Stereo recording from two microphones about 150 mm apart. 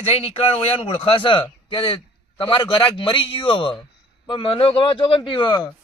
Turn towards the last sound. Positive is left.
turn(degrees=30)  # may be behind; listen again after turning